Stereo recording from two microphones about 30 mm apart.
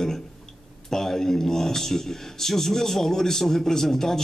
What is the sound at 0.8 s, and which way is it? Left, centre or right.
A man's voice, centre.